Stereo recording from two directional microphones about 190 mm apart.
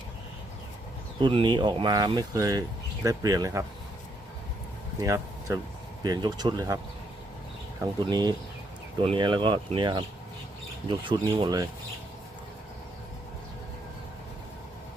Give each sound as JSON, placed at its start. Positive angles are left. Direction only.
{"t": 1.2, "sound": "speech", "side_deg": -25}
{"t": 4.9, "sound": "speech", "side_deg": -15}
{"t": 8.0, "sound": "speech", "side_deg": -20}